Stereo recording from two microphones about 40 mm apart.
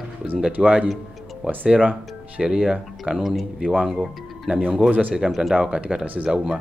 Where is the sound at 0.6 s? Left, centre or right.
Centre.